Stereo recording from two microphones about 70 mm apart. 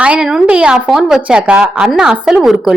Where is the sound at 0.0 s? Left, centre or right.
Centre.